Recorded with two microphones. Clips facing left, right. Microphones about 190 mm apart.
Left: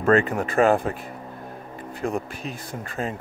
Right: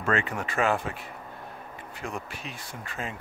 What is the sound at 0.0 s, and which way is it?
Speech, 40° left (ahead or behind).